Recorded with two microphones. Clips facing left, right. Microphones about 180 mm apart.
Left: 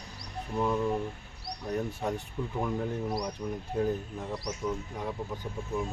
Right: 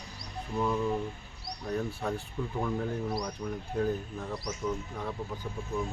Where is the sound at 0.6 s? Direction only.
15° left (ahead or behind).